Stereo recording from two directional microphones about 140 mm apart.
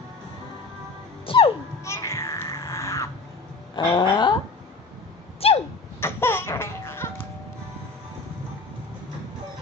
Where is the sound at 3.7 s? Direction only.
30° left (ahead or behind).